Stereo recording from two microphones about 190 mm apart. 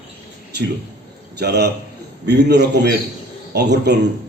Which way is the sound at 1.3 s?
60° right (ahead or behind).